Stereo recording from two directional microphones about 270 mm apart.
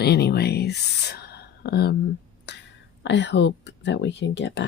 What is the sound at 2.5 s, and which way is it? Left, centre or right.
Whispering, left.